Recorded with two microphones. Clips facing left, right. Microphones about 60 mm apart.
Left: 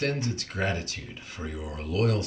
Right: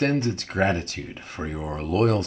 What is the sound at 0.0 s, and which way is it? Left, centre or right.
Speech, right.